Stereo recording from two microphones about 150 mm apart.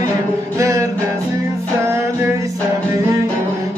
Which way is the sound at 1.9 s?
15° right (ahead or behind).